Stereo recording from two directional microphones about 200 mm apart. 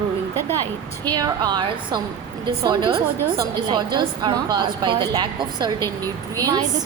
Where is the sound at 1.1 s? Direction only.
20° right (ahead or behind).